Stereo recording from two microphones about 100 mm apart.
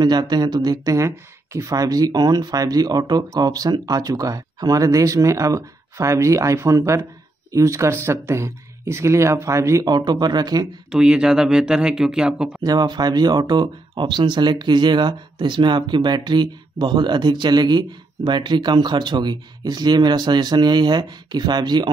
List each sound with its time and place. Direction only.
0.0 s speech: 45° right (ahead or behind)
9.8 s speech: 45° right (ahead or behind)
10.9 s speech: 10° right (ahead or behind)
12.6 s speech: 45° right (ahead or behind)